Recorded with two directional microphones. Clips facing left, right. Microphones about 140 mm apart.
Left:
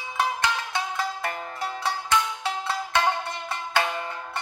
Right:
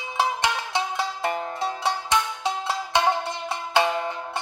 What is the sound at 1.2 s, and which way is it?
Music, 20° right (ahead or behind).